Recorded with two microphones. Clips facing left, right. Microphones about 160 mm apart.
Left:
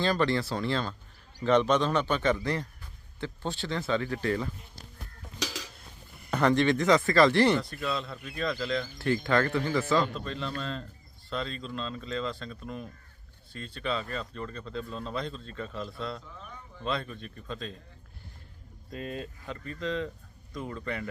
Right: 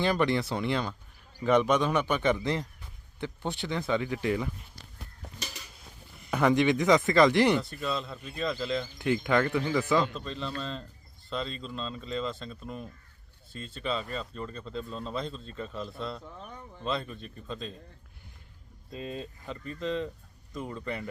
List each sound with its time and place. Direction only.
0.0 s speech: 15° right (ahead or behind)
5.4 s dishes: 90° left
6.3 s speech: 10° right (ahead or behind)
7.8 s speech: centre (ahead or behind)
8.8 s speech: 20° right (ahead or behind)
10.2 s speech: centre (ahead or behind)
18.9 s speech: 25° right (ahead or behind)
19.8 s speech: centre (ahead or behind)